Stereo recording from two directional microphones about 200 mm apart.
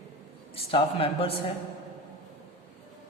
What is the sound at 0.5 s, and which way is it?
Speech, 30° left (ahead or behind).